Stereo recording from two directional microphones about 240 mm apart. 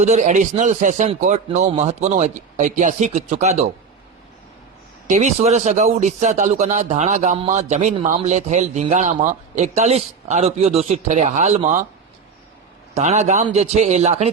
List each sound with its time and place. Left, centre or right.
0.0 s speech: right
5.0 s speech: right
12.9 s speech: right